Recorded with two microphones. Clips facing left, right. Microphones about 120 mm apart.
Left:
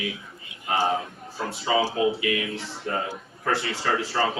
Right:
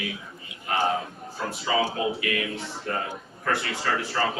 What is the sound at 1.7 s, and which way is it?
Speech, 25° left (ahead or behind).